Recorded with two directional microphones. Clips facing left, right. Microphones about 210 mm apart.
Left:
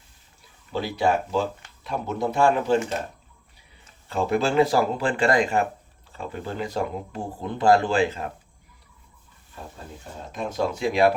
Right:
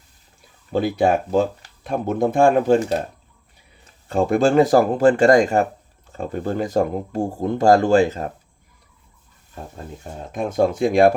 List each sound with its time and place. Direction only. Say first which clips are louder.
0.7 s speech: right 5 dB; 50° right (ahead or behind)
4.1 s speech: right 6 dB; 45° right (ahead or behind)
10.3 s speech: right 7 dB; 50° right (ahead or behind)